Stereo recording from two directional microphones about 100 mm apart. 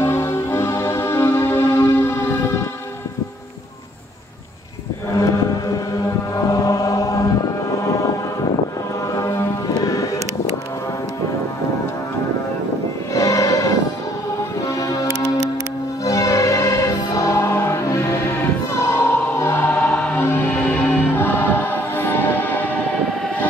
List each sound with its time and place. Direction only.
0.0 s music: 25° left (ahead or behind)
6.3 s chant: 35° left (ahead or behind)
9.1 s music: 30° left (ahead or behind)
13.1 s music: 35° left (ahead or behind)
14.8 s music: 35° left (ahead or behind)
16.0 s choir: 35° left (ahead or behind)
19.9 s music: 15° left (ahead or behind)
21.2 s choir: 20° left (ahead or behind)